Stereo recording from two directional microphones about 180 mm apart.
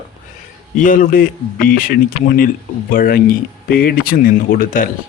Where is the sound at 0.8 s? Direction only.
50° left (ahead or behind).